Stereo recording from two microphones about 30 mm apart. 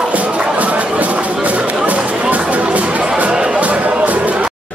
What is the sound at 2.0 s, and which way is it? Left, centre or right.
Music, right.